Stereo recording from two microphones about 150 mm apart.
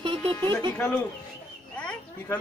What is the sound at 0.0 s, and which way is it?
Music, 35° right (ahead or behind).